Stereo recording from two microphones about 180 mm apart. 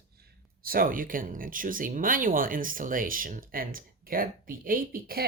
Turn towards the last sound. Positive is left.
turn(degrees=-55)  # may be behind; listen again after turning